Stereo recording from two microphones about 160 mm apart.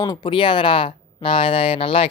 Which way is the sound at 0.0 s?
25° left (ahead or behind).